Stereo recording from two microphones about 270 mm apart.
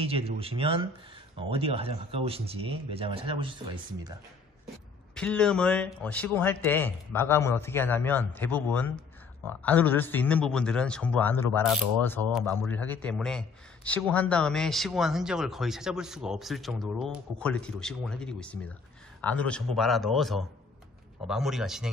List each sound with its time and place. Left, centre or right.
0.0 s speech: right
5.1 s a man's voice: centre